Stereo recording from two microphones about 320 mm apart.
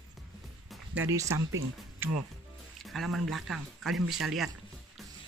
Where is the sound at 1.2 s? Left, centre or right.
Right.